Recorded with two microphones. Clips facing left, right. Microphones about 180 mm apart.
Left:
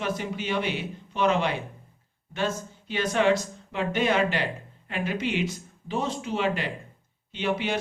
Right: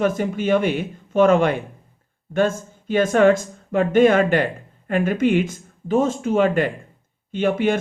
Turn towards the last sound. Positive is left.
turn(degrees=-50)  # may be behind; listen again after turning